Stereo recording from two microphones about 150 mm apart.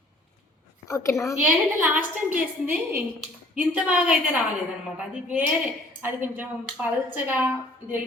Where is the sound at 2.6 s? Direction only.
10° right (ahead or behind).